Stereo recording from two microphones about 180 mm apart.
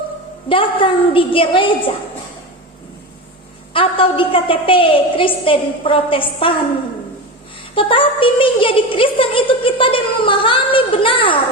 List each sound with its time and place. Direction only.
0.4 s child singing: 30° left (ahead or behind)
3.7 s child singing: 30° left (ahead or behind)
7.8 s child singing: 30° left (ahead or behind)